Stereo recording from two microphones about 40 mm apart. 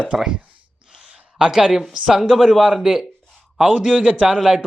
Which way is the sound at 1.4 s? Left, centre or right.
Centre.